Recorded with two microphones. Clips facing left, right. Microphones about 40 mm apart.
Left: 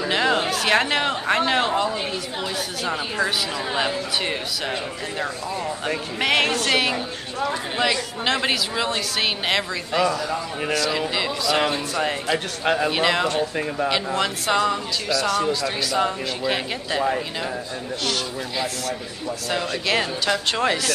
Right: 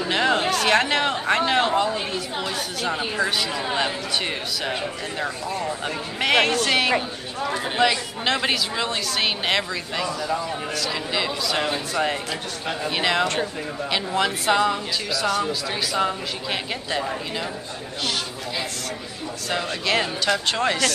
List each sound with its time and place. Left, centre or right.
0.0 s a sound: centre
2.4 s a woman's voice: centre
6.1 s a woman's voice: centre
12.6 s speech: left
12.9 s a woman's voice: centre
19.5 s a woman's voice: centre